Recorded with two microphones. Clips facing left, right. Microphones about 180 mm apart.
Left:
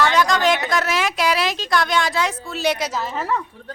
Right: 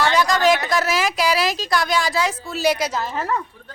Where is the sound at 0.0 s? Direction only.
5° right (ahead or behind).